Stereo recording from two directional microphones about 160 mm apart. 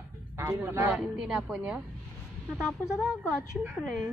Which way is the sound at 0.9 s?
5° right (ahead or behind).